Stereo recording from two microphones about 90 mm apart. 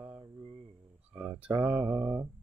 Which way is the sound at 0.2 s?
55° right (ahead or behind).